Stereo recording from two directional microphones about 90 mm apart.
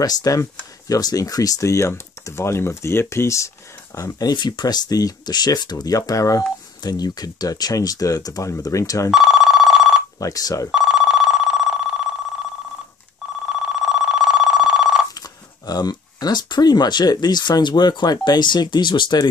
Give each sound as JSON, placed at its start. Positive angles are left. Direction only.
{"t": 0.0, "sound": "speech", "side_deg": 45}
{"t": 9.1, "sound": "telephone bell ringing", "side_deg": -5}
{"t": 10.2, "sound": "speech", "side_deg": 40}
{"t": 10.7, "sound": "telephone bell ringing", "side_deg": -5}
{"t": 13.5, "sound": "telephone bell ringing", "side_deg": -5}
{"t": 15.6, "sound": "speech", "side_deg": 50}